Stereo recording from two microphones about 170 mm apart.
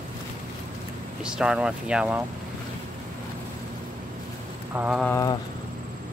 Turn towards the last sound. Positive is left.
turn(degrees=20)  # may be behind; listen again after turning